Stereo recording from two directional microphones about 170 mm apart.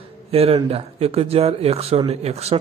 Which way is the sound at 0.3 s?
35° right (ahead or behind).